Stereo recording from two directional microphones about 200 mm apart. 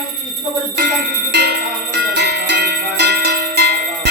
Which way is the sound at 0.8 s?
55° right (ahead or behind).